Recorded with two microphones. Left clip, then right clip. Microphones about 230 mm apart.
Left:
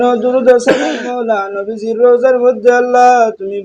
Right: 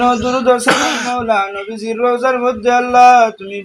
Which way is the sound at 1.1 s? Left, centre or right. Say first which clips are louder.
Even; right.